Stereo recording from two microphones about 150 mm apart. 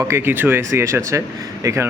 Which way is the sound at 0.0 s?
15° right (ahead or behind).